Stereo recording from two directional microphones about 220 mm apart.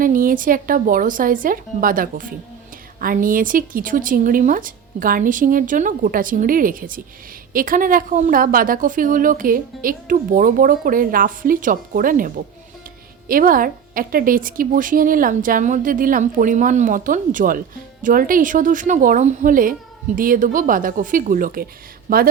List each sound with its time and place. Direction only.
0.0 s a woman's voice: 40° right (ahead or behind)